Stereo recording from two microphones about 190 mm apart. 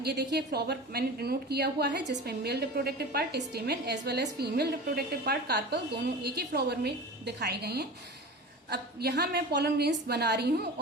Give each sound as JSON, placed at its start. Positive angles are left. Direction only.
{"t": 0.0, "sound": "a woman's voice", "side_deg": -60}